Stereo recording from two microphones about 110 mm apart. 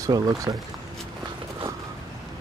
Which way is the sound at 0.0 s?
35° right (ahead or behind).